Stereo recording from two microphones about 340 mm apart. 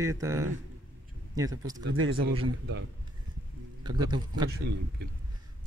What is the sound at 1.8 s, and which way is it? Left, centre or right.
Speech, right.